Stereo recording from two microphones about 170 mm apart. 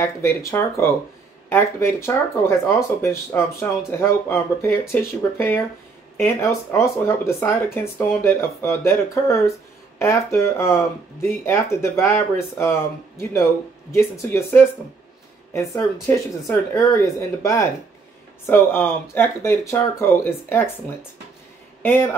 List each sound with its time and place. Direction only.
0.0 s speech: 15° left (ahead or behind)
6.1 s speech: 15° left (ahead or behind)
13.9 s speech: 15° left (ahead or behind)
21.8 s speech: 15° left (ahead or behind)